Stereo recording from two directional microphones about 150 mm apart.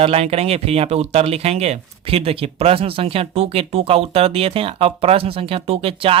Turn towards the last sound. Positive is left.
turn(degrees=-35)  # may be behind; listen again after turning